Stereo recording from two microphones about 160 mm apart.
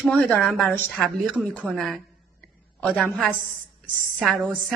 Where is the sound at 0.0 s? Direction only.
10° left (ahead or behind).